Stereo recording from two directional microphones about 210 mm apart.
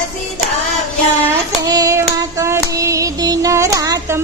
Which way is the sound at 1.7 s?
15° right (ahead or behind).